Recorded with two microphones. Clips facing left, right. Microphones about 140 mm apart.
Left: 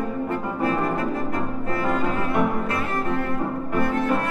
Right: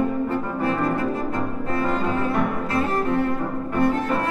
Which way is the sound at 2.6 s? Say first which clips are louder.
Right 3 dB; 30° right (ahead or behind).